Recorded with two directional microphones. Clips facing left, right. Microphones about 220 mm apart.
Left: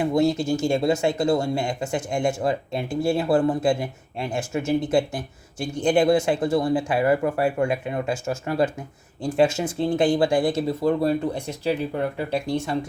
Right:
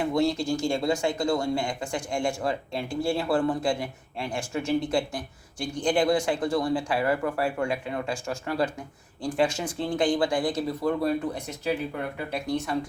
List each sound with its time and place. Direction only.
0.0 s speech: 20° left (ahead or behind)